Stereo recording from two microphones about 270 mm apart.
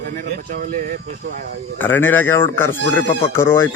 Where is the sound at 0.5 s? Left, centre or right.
Right.